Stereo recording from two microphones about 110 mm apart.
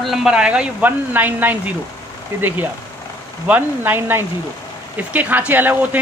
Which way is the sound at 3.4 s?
15° right (ahead or behind).